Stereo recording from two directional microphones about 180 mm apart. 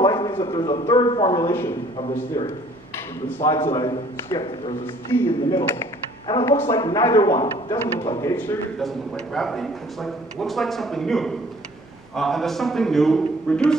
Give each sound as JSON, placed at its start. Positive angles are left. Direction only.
{"t": 0.0, "sound": "a man's voice", "side_deg": 20}
{"t": 2.0, "sound": "speech", "side_deg": 30}
{"t": 3.4, "sound": "a man's voice", "side_deg": 20}
{"t": 5.1, "sound": "a man's voice", "side_deg": 20}